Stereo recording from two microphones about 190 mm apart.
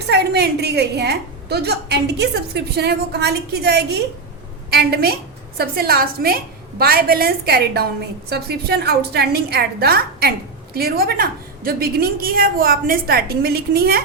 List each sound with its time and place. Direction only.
0.1 s a woman's voice: 60° right (ahead or behind)